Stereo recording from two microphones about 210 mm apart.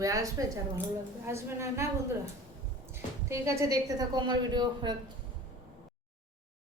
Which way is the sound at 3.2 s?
15° right (ahead or behind).